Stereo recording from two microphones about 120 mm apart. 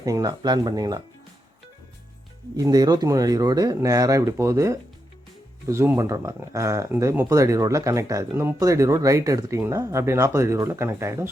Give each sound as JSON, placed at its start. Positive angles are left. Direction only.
{"t": 0.0, "sound": "speech", "side_deg": -30}
{"t": 2.6, "sound": "speech", "side_deg": -30}